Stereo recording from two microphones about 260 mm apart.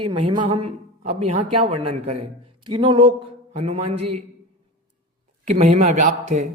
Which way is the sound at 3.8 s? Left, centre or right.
Right.